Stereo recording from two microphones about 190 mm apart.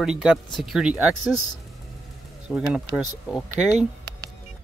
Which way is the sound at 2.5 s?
Centre (ahead or behind).